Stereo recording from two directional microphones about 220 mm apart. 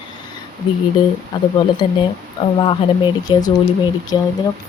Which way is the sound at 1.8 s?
20° left (ahead or behind).